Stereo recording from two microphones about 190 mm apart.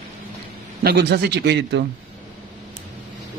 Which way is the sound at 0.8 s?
55° right (ahead or behind).